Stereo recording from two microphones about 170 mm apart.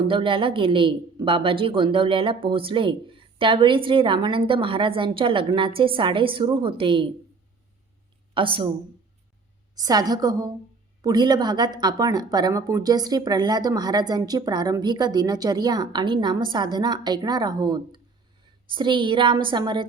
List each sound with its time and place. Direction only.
0.0 s a woman's voice: 30° right (ahead or behind)
8.3 s speech: 30° right (ahead or behind)
9.7 s a woman's voice: 20° right (ahead or behind)